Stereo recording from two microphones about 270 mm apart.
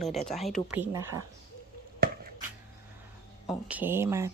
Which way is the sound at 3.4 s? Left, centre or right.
Centre.